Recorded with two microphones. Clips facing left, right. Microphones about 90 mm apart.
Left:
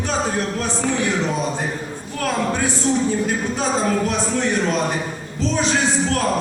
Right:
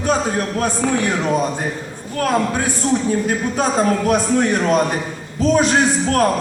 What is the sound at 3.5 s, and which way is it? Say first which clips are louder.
A man's voice: right 4 dB; 50° right (ahead or behind).